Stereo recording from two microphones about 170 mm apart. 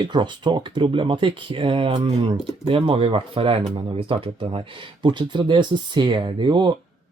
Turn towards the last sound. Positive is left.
turn(degrees=-25)  # may be behind; listen again after turning